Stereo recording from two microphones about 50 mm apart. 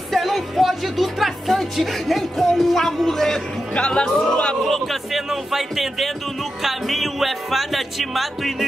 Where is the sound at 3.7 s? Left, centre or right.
Left.